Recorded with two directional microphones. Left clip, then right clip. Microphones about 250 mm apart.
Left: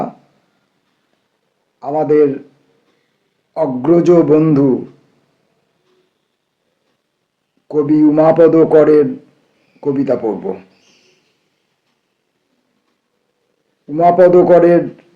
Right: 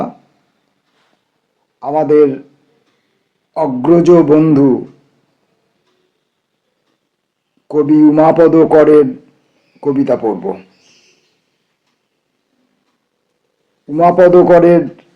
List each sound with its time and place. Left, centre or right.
1.8 s speech: right
3.5 s speech: right
7.7 s a man's voice: right
13.8 s speech: right